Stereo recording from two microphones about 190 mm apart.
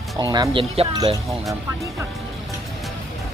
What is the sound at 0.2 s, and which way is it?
Speech, 20° right (ahead or behind).